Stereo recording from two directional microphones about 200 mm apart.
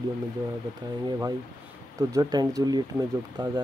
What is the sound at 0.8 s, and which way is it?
Speech, 20° right (ahead or behind).